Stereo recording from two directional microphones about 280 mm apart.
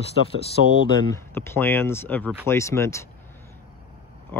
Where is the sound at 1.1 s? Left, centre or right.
Centre.